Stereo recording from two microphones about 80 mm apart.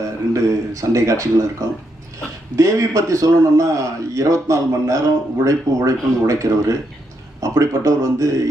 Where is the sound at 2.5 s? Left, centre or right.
Right.